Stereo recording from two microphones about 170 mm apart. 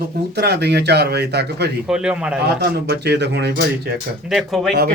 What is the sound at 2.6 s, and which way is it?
Speech, 80° right.